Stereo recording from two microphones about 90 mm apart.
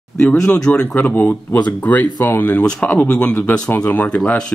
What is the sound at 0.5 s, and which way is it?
Speech, 10° left (ahead or behind).